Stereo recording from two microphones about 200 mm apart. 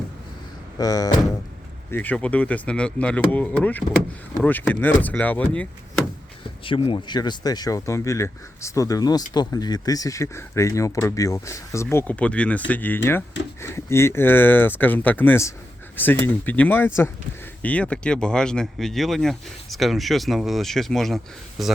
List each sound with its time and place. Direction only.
0.8 s speech: 20° left (ahead or behind)
6.7 s speech: 25° left (ahead or behind); by 21.2 s centre (ahead or behind)